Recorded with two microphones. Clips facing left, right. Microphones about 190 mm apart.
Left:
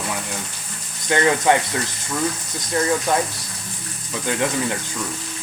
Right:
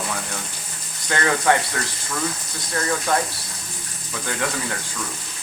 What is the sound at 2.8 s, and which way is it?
Speech, 20° left (ahead or behind).